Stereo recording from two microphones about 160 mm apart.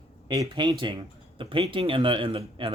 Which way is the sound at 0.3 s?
30° right (ahead or behind).